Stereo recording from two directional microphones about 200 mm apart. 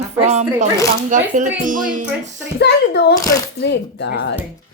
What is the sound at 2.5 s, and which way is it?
Speech, 55° left (ahead or behind).